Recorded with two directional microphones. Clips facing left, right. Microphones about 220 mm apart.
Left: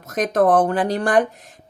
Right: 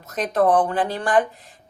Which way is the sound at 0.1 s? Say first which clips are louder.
Left 2 dB; 45° left (ahead or behind).